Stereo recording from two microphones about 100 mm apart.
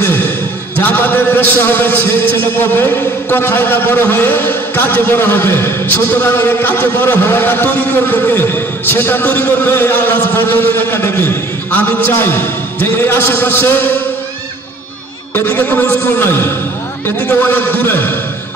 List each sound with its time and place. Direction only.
0.0 s a sound: 20° left (ahead or behind)
0.7 s a man's voice: 20° left (ahead or behind)
15.3 s a man's voice: 20° left (ahead or behind)